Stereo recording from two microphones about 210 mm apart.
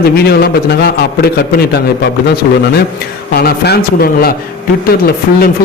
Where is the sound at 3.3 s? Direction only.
50° left (ahead or behind).